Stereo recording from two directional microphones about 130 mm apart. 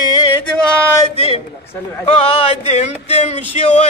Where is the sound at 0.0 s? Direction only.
30° left (ahead or behind).